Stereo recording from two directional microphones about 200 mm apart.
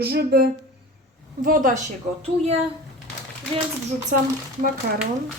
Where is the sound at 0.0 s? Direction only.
55° right (ahead or behind).